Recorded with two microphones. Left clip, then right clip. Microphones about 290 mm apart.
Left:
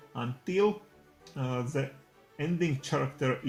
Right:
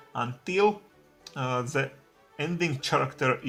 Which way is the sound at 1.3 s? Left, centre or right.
Right.